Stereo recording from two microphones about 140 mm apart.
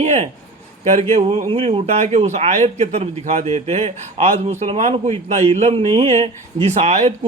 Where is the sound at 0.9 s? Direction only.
50° right (ahead or behind).